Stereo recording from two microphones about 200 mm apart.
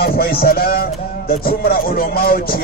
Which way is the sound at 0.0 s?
50° left (ahead or behind).